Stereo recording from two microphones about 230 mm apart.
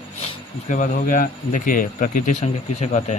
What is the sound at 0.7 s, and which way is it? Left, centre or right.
Speech, left.